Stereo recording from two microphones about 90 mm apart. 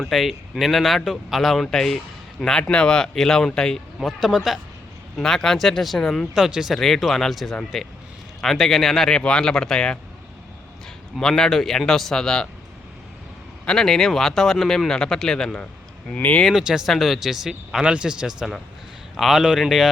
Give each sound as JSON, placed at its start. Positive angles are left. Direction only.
{"t": 0.0, "sound": "speech", "side_deg": 0}
{"t": 11.2, "sound": "speech", "side_deg": 5}
{"t": 13.7, "sound": "speech", "side_deg": 5}
{"t": 16.5, "sound": "speech", "side_deg": -5}